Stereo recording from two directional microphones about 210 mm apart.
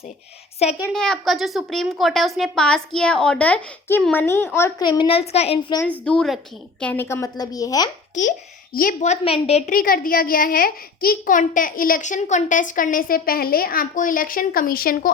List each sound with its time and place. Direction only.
0.6 s a child's voice: 30° left (ahead or behind)
0.9 s a woman's voice: 5° left (ahead or behind); by 5.7 s 30° left (ahead or behind)
6.1 s a woman's voice: centre (ahead or behind)
8.1 s a child's voice: 35° left (ahead or behind)
9.7 s a child's voice: 45° left (ahead or behind)